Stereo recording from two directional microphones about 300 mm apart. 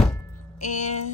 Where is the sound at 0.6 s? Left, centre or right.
Left.